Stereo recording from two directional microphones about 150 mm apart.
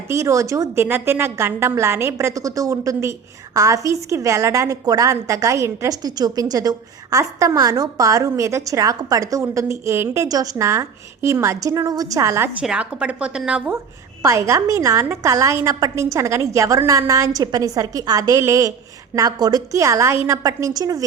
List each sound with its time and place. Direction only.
0.1 s a woman's voice: 20° right (ahead or behind)
12.6 s a woman's voice: 5° right (ahead or behind)
14.2 s a woman's voice: 20° right (ahead or behind)